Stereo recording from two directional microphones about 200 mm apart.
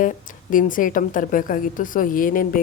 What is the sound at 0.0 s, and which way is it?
A woman's voice, 40° left (ahead or behind).